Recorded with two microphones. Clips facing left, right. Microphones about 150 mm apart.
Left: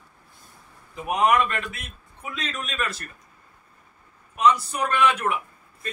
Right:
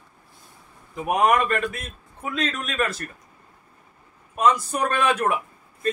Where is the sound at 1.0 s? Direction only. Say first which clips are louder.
Right 1 dB; 50° right (ahead or behind).